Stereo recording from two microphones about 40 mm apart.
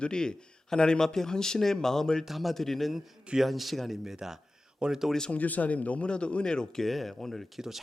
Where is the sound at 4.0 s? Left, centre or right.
Centre.